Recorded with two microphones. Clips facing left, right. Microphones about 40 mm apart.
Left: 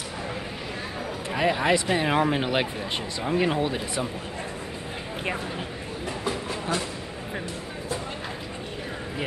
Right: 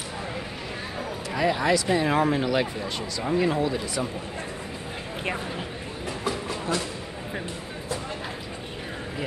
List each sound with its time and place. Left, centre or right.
1.3 s speech: left
6.0 s train: left